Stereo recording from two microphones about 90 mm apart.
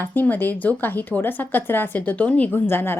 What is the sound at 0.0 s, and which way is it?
Speech, 20° left (ahead or behind).